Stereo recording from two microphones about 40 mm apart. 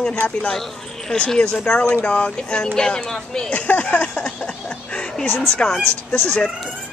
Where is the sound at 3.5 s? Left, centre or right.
Left.